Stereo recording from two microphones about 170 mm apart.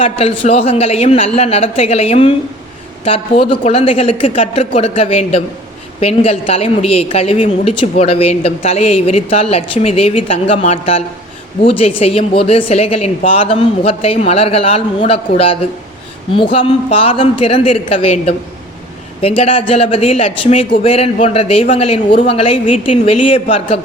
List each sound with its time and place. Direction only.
0.0 s a woman's voice: 35° left (ahead or behind)
19.4 s a woman's voice: 35° left (ahead or behind)